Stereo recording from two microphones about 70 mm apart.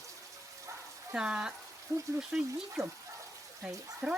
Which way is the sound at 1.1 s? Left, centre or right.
Centre.